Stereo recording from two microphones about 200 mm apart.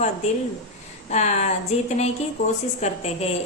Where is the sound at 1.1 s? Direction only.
35° left (ahead or behind).